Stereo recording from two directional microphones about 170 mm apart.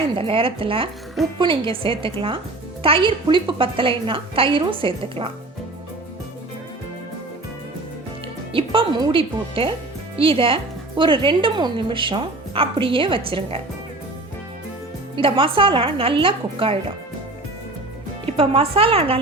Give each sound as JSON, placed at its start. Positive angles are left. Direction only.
{"t": 0.2, "sound": "a woman's voice", "side_deg": -30}
{"t": 8.5, "sound": "a woman's voice", "side_deg": -30}
{"t": 15.1, "sound": "a woman's voice", "side_deg": -30}
{"t": 18.3, "sound": "a woman's voice", "side_deg": -35}